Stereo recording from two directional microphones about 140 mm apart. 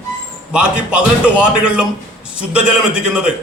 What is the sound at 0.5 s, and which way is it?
A man's voice, 5° right (ahead or behind).